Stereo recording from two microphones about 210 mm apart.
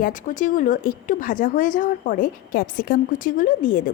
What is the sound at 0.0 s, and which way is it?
A woman's voice, 40° left (ahead or behind).